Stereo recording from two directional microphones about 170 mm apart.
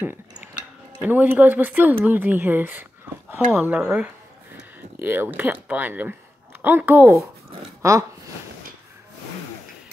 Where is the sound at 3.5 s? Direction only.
5° right (ahead or behind).